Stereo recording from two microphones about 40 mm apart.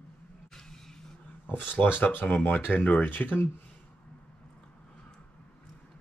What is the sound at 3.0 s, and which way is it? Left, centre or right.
Speech, left.